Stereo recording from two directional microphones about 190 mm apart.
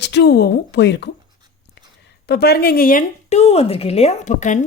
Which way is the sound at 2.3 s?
60° left (ahead or behind).